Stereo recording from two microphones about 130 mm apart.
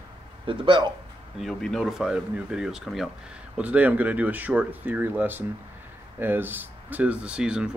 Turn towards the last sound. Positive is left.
turn(degrees=-5)  # may be behind; listen again after turning